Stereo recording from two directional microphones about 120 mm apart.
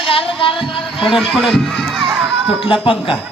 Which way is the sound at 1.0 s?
Centre (ahead or behind).